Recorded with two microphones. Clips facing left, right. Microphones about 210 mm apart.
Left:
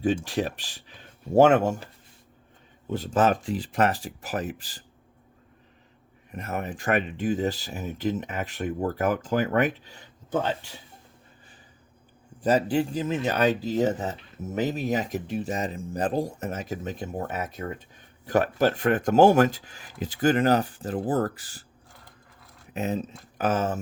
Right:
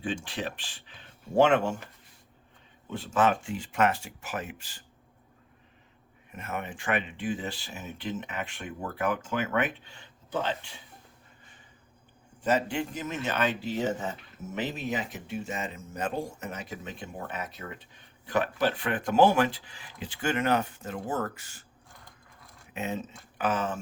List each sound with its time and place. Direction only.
0.3 s speech: 40° left (ahead or behind)
2.9 s speech: 40° left (ahead or behind)
6.3 s speech: 35° left (ahead or behind)
12.4 s speech: 35° left (ahead or behind)
22.7 s speech: 40° left (ahead or behind)